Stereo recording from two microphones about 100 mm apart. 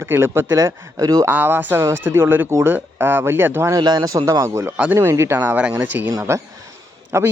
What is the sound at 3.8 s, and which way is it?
A man's voice, 45° right (ahead or behind).